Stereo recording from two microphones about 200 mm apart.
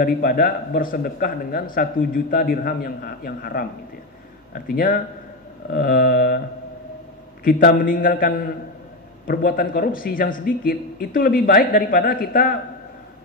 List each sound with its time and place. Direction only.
0.0 s speech: 45° left (ahead or behind)
4.6 s speech: 45° left (ahead or behind)
7.4 s speech: 45° left (ahead or behind)
9.3 s speech: 50° left (ahead or behind)